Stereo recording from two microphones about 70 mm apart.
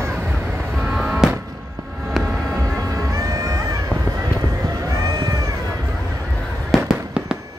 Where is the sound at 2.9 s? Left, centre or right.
Right.